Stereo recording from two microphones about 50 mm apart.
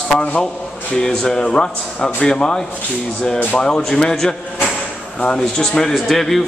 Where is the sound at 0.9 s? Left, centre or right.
Centre.